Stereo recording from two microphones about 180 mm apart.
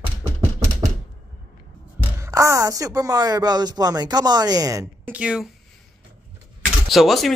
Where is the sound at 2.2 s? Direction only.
15° right (ahead or behind).